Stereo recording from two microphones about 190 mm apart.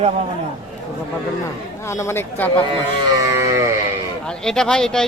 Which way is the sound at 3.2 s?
15° right (ahead or behind).